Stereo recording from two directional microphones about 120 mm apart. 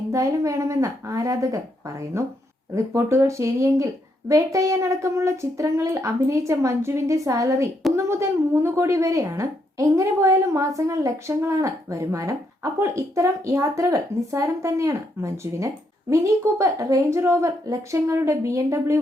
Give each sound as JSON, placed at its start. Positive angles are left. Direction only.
{"t": 0.1, "sound": "speech", "side_deg": -25}